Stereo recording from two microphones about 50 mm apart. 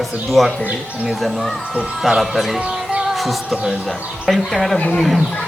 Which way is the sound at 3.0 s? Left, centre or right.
Centre.